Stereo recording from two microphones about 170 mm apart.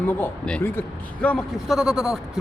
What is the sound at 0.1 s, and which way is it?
Speech, 10° left (ahead or behind).